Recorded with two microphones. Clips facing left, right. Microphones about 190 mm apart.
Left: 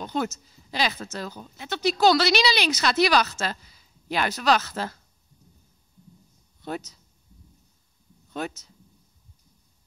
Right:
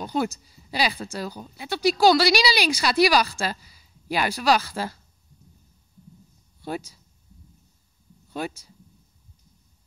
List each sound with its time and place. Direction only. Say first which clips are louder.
0.0 s speech: right 2 dB; 10° right (ahead or behind)
6.6 s speech: right 1 dB; 10° right (ahead or behind)
8.3 s speech: right 1 dB; 10° right (ahead or behind)